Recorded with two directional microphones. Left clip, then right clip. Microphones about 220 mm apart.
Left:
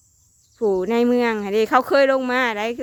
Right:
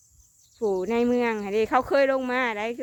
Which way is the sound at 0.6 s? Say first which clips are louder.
Left 5 dB; 25° left (ahead or behind).